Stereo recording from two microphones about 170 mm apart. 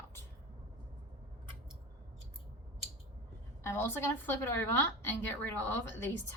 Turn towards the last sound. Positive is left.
turn(degrees=10)  # may be behind; listen again after turning